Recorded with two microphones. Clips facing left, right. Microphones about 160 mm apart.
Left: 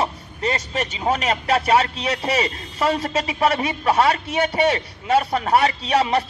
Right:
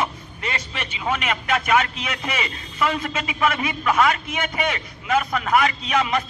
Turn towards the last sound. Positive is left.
turn(degrees=35)  # may be behind; listen again after turning